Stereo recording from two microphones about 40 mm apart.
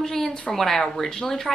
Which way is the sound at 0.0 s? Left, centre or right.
Centre.